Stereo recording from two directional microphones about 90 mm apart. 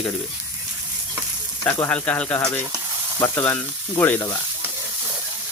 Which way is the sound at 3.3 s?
25° left (ahead or behind).